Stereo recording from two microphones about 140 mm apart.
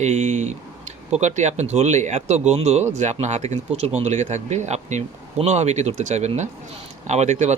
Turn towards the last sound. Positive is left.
turn(degrees=-55)  # may be behind; listen again after turning